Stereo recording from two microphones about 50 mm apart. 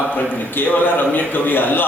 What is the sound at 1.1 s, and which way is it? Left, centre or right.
Speech, left.